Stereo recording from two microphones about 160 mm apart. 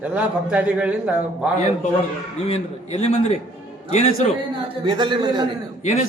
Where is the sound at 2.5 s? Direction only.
35° left (ahead or behind).